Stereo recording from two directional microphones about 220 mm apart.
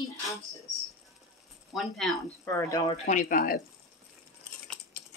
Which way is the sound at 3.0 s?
35° left (ahead or behind).